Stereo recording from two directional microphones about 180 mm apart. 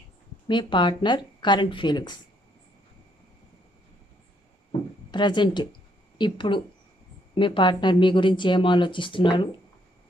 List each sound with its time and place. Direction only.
0.5 s speech: 25° left (ahead or behind)
5.1 s speech: 25° left (ahead or behind)